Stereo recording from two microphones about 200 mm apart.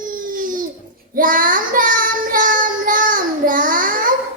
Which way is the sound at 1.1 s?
45° right (ahead or behind).